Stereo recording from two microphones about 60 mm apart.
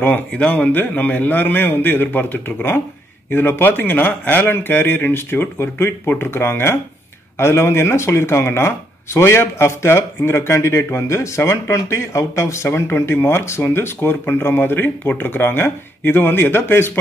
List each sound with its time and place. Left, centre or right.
0.3 s a man's voice: centre; by 17.0 s left